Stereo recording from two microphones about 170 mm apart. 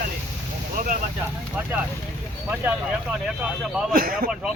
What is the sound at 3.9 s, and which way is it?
Speech, 55° right (ahead or behind).